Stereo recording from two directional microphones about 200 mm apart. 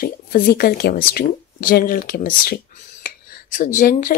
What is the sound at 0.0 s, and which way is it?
Speech, 45° left (ahead or behind).